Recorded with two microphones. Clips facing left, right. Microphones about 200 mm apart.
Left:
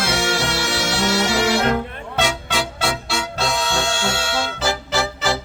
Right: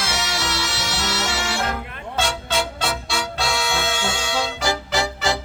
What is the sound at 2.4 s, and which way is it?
Music, 5° left (ahead or behind).